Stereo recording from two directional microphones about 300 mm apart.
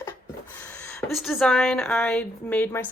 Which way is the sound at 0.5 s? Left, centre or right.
Centre.